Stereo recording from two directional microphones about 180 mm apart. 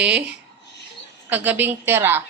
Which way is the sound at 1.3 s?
10° right (ahead or behind).